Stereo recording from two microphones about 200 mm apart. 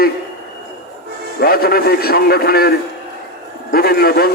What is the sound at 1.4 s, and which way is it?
A man's voice, 50° left (ahead or behind).